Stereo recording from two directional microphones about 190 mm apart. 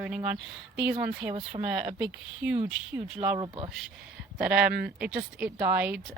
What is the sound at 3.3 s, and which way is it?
Speech, 25° right (ahead or behind).